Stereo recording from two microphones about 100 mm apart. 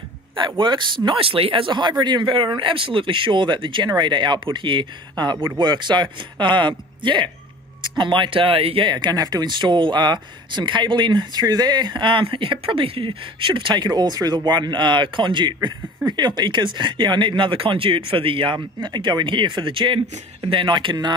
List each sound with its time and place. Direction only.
0.6 s speech: 50° right (ahead or behind)